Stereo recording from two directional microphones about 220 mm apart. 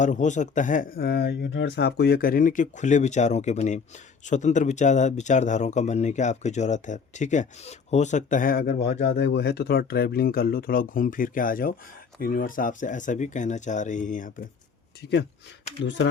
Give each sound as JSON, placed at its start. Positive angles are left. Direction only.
{"t": 0.0, "sound": "speech", "side_deg": 35}
{"t": 15.8, "sound": "speech", "side_deg": 55}